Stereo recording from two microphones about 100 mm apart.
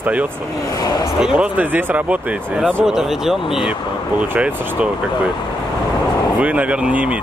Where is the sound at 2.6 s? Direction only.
5° right (ahead or behind).